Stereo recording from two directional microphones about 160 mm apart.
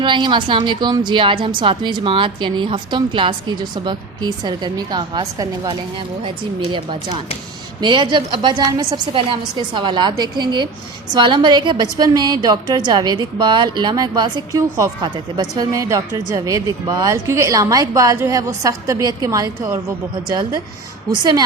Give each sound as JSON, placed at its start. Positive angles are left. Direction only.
{"t": 0.0, "sound": "a woman's voice", "side_deg": -30}